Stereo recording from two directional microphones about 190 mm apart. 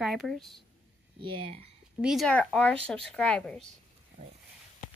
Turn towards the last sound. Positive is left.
turn(degrees=5)  # may be behind; listen again after turning